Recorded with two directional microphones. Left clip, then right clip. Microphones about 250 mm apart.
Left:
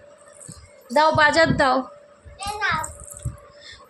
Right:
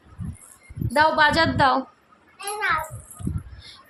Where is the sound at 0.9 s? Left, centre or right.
Centre.